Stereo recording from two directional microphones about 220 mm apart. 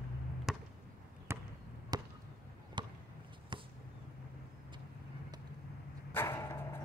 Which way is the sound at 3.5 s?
20° right (ahead or behind).